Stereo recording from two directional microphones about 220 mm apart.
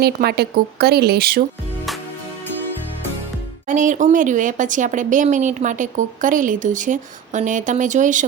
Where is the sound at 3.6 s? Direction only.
35° right (ahead or behind).